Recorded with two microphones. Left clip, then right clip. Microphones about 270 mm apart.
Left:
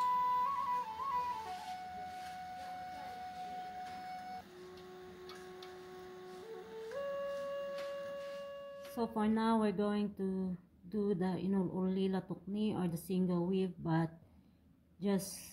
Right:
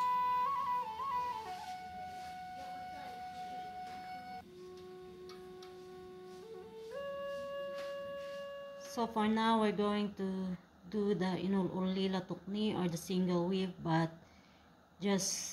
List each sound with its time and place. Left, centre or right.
0.0 s flute: centre
6.9 s music: centre
8.9 s speech: centre